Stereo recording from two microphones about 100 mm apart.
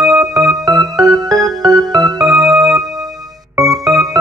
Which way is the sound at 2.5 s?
5° right (ahead or behind).